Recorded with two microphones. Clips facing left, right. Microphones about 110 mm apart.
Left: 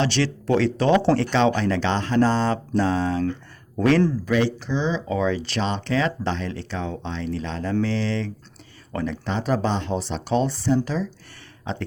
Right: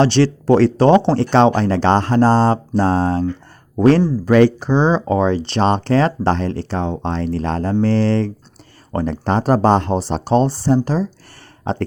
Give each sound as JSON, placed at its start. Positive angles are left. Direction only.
{"t": 0.0, "sound": "speech", "side_deg": -35}
{"t": 4.3, "sound": "speech", "side_deg": -55}